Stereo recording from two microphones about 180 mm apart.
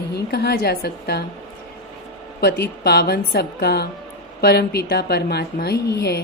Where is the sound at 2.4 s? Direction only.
60° left (ahead or behind).